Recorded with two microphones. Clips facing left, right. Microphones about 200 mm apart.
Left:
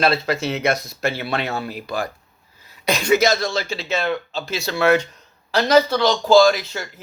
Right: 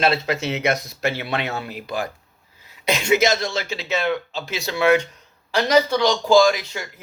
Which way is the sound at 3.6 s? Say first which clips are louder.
Even; 15° right (ahead or behind).